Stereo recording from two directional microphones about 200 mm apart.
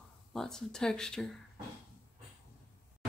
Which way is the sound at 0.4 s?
5° left (ahead or behind).